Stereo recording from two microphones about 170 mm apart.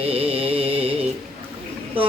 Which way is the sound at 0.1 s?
35° right (ahead or behind).